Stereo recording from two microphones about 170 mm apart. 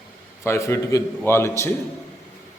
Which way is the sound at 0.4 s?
15° left (ahead or behind).